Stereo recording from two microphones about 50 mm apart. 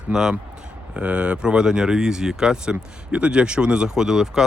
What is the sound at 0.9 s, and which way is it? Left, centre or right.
Speech, right.